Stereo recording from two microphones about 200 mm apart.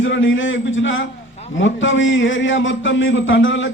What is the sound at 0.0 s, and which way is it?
A man's voice, 75° left (ahead or behind).